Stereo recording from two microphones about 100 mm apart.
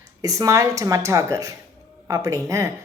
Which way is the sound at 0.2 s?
35° right (ahead or behind).